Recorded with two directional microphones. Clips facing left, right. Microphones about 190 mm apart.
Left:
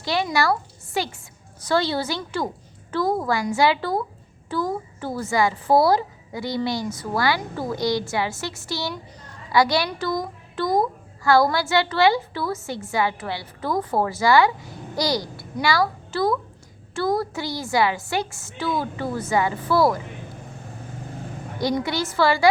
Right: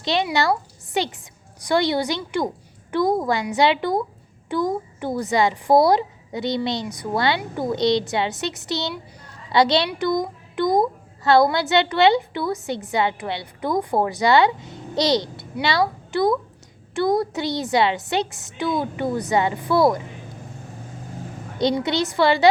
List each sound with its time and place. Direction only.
0.0 s a woman's voice: 20° right (ahead or behind)
21.6 s a child's voice: 20° right (ahead or behind)